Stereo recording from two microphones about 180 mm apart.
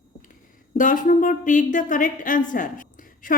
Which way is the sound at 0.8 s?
45° left (ahead or behind).